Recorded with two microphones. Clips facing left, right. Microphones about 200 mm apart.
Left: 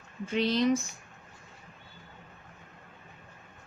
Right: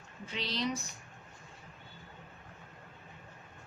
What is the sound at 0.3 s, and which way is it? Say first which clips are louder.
Speech: left 10 dB; 50° left (ahead or behind).